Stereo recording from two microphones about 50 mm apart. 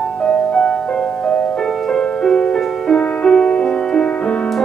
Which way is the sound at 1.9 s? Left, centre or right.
Centre.